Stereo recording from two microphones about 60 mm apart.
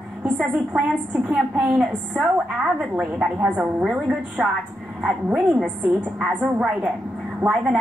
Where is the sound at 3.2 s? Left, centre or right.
Centre.